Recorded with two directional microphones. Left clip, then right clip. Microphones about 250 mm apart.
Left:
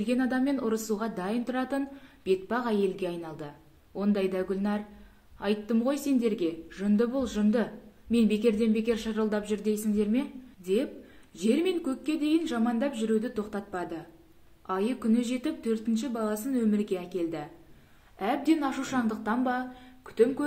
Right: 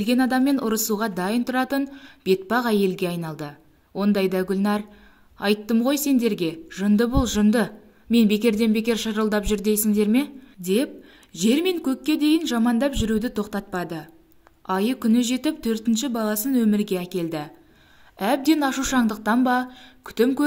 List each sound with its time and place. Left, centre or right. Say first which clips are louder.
0.0 s a woman's voice: right 7 dB; right